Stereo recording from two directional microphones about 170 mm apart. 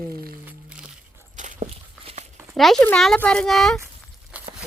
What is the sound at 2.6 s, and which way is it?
Speech, centre (ahead or behind).